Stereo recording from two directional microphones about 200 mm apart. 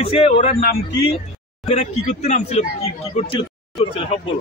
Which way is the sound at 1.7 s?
35° left (ahead or behind).